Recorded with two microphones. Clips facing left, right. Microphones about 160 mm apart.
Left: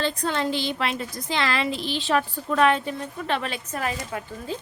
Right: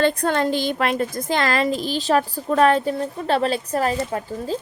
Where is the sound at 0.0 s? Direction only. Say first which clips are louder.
Right 6 dB; 55° right (ahead or behind).